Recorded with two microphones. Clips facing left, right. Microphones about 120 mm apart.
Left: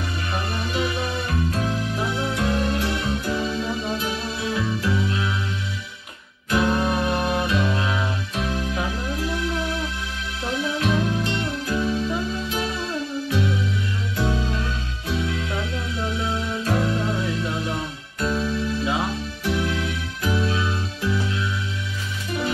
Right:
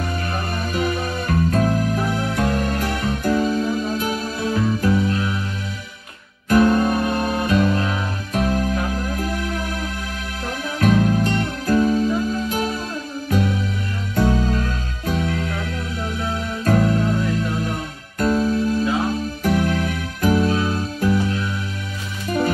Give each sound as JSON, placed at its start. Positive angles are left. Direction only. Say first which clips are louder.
{"t": 0.3, "sound": "music", "louder": "right 2 dB", "side_deg": -45}
{"t": 6.5, "sound": "music", "louder": "right 5 dB", "side_deg": -45}